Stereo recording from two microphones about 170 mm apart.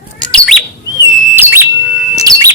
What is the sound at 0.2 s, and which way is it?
Bird, 5° left (ahead or behind).